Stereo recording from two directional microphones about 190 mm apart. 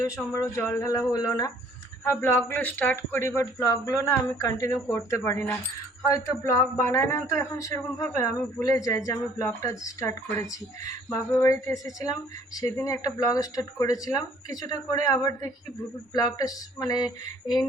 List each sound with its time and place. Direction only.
0.0 s speech: 15° left (ahead or behind)